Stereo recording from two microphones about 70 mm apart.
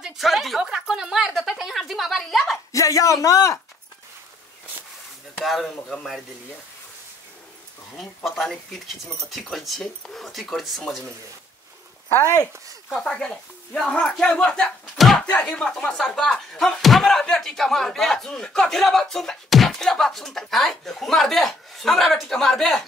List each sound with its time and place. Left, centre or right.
0.0 s a woman's voice: centre
2.7 s a man's voice: left
5.4 s speech: centre
8.0 s speech: centre
12.9 s speech: centre